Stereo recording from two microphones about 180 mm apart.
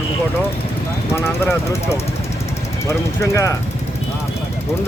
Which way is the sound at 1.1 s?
15° left (ahead or behind).